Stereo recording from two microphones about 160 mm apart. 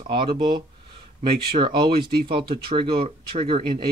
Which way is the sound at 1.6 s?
30° right (ahead or behind).